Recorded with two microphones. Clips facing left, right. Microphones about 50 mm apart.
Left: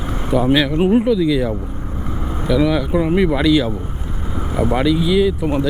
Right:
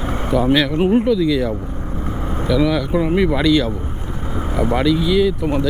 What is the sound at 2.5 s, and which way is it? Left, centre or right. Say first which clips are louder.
Speech: left 1 dB; centre.